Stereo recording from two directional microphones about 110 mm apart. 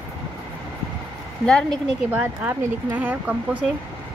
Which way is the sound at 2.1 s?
15° right (ahead or behind).